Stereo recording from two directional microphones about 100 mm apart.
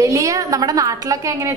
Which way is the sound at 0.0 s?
35° right (ahead or behind).